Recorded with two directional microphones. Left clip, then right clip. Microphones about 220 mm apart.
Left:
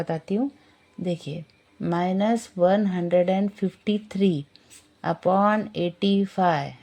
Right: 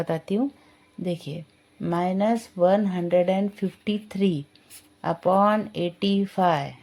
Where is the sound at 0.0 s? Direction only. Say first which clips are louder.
Right 1 dB; centre (ahead or behind).